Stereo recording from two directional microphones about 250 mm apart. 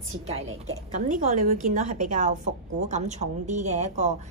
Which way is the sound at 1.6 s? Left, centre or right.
Right.